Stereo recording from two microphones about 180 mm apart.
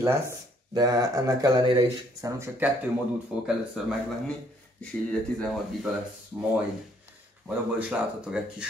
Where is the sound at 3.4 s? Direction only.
5° right (ahead or behind).